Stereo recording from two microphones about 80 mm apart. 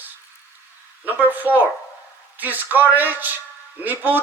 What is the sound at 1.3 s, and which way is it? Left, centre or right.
A woman's voice, right.